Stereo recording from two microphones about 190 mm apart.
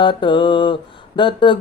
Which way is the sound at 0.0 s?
25° left (ahead or behind).